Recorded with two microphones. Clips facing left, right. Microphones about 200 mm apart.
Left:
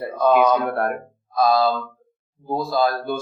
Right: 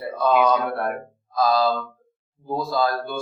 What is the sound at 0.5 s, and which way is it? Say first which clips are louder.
Speech: left 2 dB; 45° left (ahead or behind).